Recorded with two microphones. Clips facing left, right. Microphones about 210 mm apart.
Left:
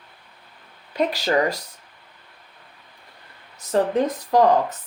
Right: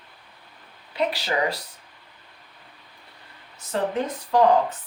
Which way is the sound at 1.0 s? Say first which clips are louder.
Left 4 dB; 45° left (ahead or behind).